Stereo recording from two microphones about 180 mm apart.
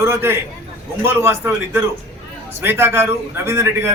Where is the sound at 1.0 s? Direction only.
15° right (ahead or behind).